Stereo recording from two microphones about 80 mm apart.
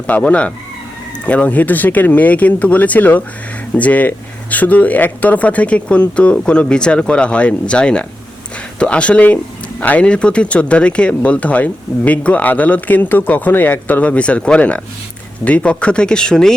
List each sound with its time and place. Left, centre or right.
0.1 s speech: centre